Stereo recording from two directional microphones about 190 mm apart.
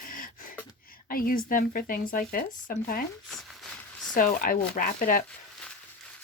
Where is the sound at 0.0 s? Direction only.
45° left (ahead or behind).